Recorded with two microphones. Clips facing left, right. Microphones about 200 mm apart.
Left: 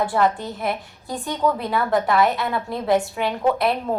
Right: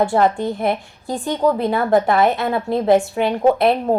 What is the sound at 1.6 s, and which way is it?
Speech, 50° right (ahead or behind).